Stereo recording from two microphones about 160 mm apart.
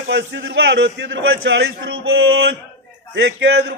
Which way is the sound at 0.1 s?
90° right.